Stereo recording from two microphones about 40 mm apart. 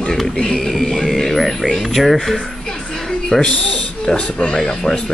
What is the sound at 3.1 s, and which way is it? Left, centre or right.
Speech, centre.